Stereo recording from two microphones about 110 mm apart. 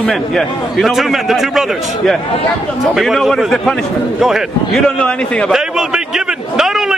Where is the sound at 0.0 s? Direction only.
5° left (ahead or behind).